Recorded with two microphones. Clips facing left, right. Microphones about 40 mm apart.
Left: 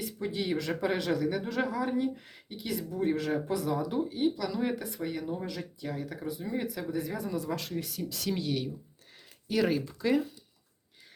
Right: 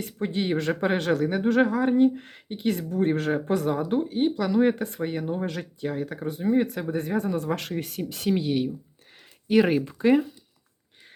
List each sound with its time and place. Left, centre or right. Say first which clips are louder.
0.0 s speech: right 5 dB; right
8.3 s speech: right 8 dB; centre